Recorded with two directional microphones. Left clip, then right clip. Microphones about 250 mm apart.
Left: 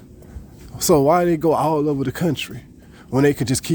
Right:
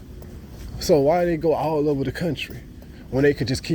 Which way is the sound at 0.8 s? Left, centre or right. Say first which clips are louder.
Left 3 dB; left.